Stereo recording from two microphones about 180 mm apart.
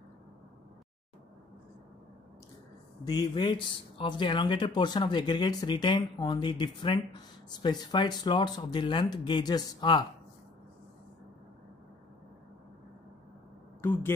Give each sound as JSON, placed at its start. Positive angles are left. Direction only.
{"t": 3.0, "sound": "speech", "side_deg": 20}
{"t": 13.7, "sound": "speech", "side_deg": 15}